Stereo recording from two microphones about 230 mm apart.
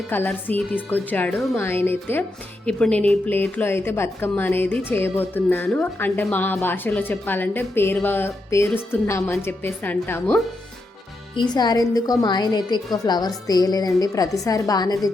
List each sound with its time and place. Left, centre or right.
0.1 s speech: centre